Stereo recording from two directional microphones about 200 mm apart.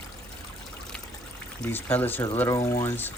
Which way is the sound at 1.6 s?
10° left (ahead or behind).